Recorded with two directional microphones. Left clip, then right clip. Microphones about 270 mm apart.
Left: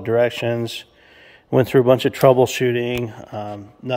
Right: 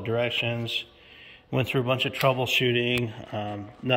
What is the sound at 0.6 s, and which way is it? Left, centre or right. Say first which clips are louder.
Speech: left 2 dB; left.